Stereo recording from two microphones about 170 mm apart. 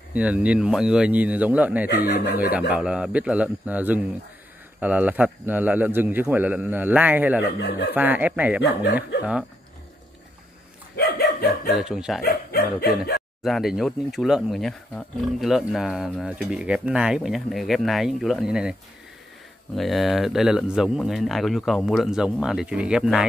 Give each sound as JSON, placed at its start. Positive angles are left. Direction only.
{"t": 0.1, "sound": "a man's voice", "side_deg": -5}
{"t": 1.9, "sound": "dog", "side_deg": 65}
{"t": 2.7, "sound": "a man's voice", "side_deg": -5}
{"t": 8.5, "sound": "speech", "side_deg": 80}
{"t": 8.9, "sound": "a man's voice", "side_deg": -5}
{"t": 11.0, "sound": "dog", "side_deg": 70}
{"t": 11.7, "sound": "speech", "side_deg": -5}
{"t": 12.2, "sound": "dog", "side_deg": 65}
{"t": 13.4, "sound": "speech", "side_deg": 0}